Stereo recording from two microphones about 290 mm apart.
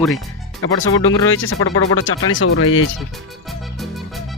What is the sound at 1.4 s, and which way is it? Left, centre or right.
Speech, left.